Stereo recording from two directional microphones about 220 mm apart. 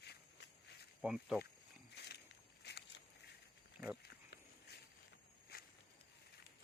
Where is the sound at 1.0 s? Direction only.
5° right (ahead or behind).